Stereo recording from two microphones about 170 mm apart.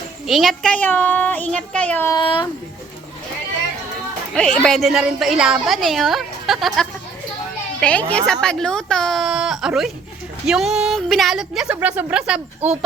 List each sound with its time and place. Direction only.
0.3 s a child's voice: centre (ahead or behind)
2.1 s speech: 30° left (ahead or behind)
4.4 s a woman's voice: 5° left (ahead or behind)